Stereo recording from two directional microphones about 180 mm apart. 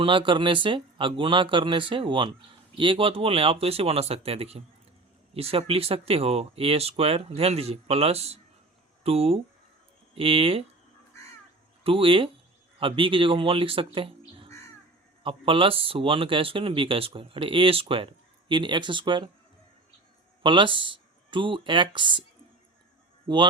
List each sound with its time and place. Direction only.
0.0 s speech: 30° right (ahead or behind)
11.8 s speech: 30° right (ahead or behind)
15.2 s speech: 30° right (ahead or behind)
20.4 s speech: 25° right (ahead or behind)
23.3 s speech: 30° right (ahead or behind)